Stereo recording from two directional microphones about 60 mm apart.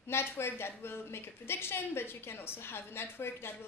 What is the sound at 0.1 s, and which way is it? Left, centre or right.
A woman's voice, left.